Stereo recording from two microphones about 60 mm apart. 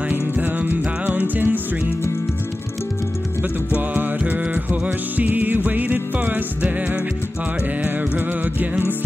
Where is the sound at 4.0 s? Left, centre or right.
Right.